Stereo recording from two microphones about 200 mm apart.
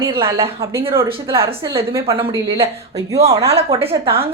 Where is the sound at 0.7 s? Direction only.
10° right (ahead or behind).